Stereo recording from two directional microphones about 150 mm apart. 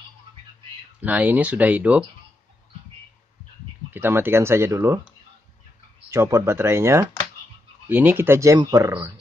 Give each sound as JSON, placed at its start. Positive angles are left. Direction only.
{"t": 1.0, "sound": "speech", "side_deg": -10}
{"t": 3.9, "sound": "speech", "side_deg": -15}
{"t": 6.0, "sound": "speech", "side_deg": -20}